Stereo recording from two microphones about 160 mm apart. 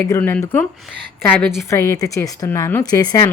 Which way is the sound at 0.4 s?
10° left (ahead or behind).